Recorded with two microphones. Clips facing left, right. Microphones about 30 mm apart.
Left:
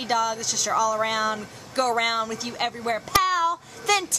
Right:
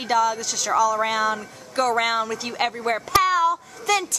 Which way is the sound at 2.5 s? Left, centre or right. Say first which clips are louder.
Right 3 dB; centre.